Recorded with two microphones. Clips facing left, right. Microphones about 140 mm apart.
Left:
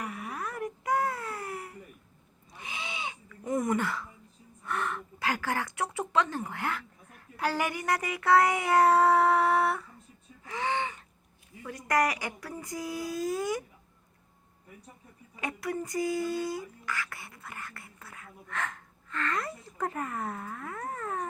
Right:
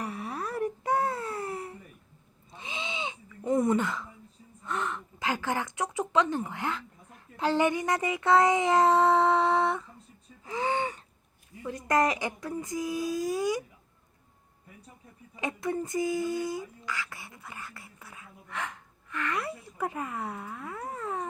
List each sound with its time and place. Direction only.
0.0 s wail: 30° right (ahead or behind)
2.5 s a sound: 25° right (ahead or behind)
4.6 s a child's voice: 20° right (ahead or behind)
10.4 s gasp: 30° right (ahead or behind)
11.6 s speech: 25° right (ahead or behind)
15.4 s speech: 20° right (ahead or behind)